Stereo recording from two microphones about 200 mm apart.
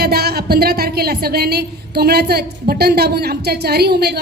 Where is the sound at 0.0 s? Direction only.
50° right (ahead or behind).